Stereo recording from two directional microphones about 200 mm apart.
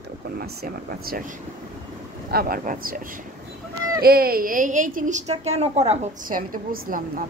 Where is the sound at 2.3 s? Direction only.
45° right (ahead or behind).